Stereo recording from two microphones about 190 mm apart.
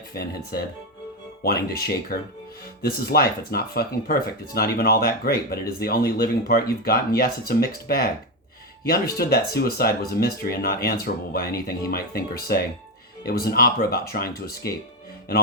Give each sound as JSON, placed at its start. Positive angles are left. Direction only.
{"t": 0.1, "sound": "speech", "side_deg": 55}